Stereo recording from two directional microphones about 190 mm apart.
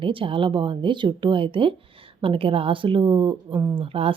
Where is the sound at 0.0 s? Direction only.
25° right (ahead or behind).